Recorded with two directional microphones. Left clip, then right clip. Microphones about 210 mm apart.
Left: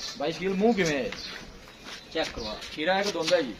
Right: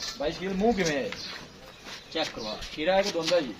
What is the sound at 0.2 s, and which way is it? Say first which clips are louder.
Speech: left 2 dB; 35° left (ahead or behind).